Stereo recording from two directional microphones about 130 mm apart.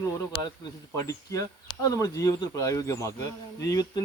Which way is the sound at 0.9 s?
25° left (ahead or behind).